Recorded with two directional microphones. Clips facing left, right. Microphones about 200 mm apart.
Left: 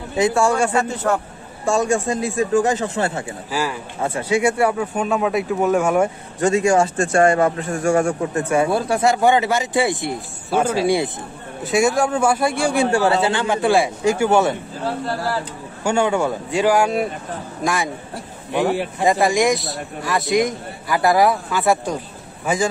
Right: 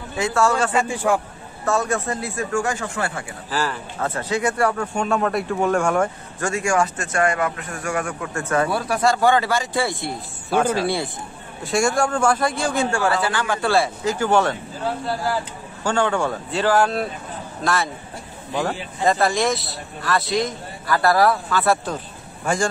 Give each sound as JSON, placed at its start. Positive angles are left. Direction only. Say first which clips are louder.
{"t": 0.1, "sound": "a man's voice", "louder": "left 3 dB", "side_deg": 15}
{"t": 0.7, "sound": "a man's voice", "louder": "left 1 dB", "side_deg": -10}
{"t": 1.6, "sound": "a man's voice", "louder": "left 3 dB", "side_deg": 15}
{"t": 3.4, "sound": "a man's voice", "louder": "right 1 dB", "side_deg": 10}
{"t": 6.4, "sound": "speech", "louder": "left 5 dB", "side_deg": 20}
{"t": 10.1, "sound": "a man's voice", "louder": "left 1 dB", "side_deg": 5}
{"t": 18.5, "sound": "speech", "louder": "left 5 dB", "side_deg": 5}
{"t": 19.0, "sound": "a man's voice", "louder": "left 2 dB", "side_deg": 15}
{"t": 22.4, "sound": "a man's voice", "louder": "left 2 dB", "side_deg": 5}